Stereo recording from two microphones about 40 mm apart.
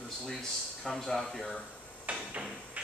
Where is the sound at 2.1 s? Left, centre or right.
Right.